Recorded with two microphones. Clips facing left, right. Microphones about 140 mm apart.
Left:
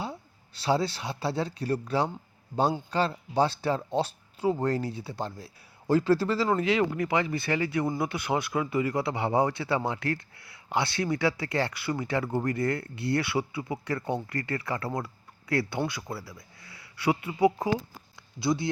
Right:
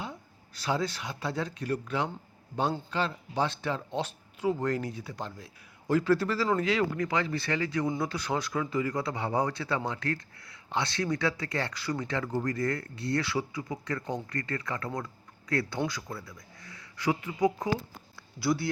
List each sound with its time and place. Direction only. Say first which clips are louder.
0.0 s a man's voice: left 4 dB; 30° left (ahead or behind)